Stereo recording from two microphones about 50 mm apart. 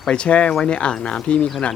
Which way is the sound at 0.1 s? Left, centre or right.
Left.